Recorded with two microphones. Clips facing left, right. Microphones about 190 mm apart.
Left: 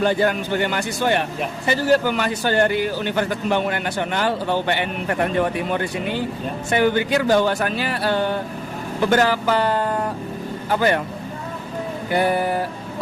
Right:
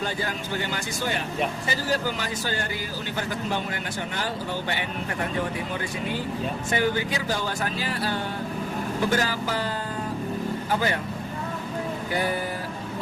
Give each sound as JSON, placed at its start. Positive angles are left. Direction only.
{"t": 0.0, "sound": "speech", "side_deg": 65}
{"t": 12.1, "sound": "speech", "side_deg": 65}